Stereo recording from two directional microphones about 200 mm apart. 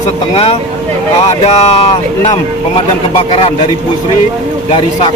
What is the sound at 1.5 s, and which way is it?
Speech, 30° left (ahead or behind).